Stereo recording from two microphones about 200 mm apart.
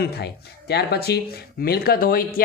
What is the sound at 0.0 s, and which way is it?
Speech, 55° left (ahead or behind).